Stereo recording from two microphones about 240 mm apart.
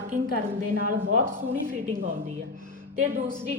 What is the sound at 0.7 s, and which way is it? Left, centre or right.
Speech, right.